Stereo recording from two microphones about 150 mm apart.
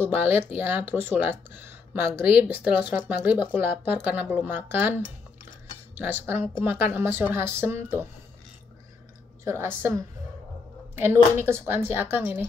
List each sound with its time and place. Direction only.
0.1 s speech: 15° right (ahead or behind)
5.9 s speech: 15° right (ahead or behind)
9.4 s speech: 15° right (ahead or behind)
11.3 s speech: 15° right (ahead or behind)